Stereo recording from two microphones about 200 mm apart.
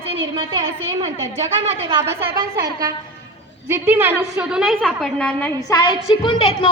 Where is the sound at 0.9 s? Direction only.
15° right (ahead or behind); by 5.7 s 5° left (ahead or behind).